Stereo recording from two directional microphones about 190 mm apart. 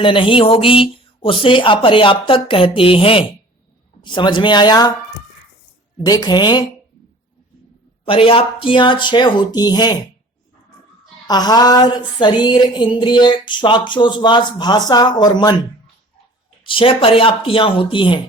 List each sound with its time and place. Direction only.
0.0 s music: 25° left (ahead or behind)
6.0 s music: 20° left (ahead or behind)
8.0 s music: 30° left (ahead or behind)
11.3 s music: 20° left (ahead or behind)
16.6 s music: 30° left (ahead or behind)